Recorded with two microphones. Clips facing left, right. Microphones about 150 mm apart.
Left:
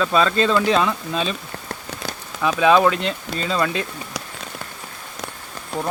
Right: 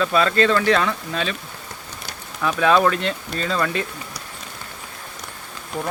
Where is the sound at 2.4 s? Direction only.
10° left (ahead or behind).